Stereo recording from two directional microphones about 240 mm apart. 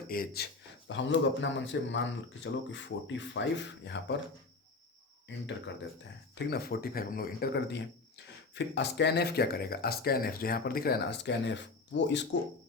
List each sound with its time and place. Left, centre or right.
0.1 s a man's voice: left
5.3 s a man's voice: left